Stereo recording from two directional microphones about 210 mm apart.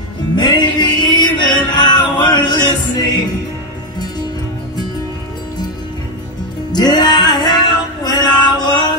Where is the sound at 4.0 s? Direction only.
20° left (ahead or behind).